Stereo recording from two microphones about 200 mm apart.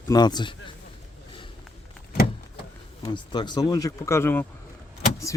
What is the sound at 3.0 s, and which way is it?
Speech, 20° left (ahead or behind).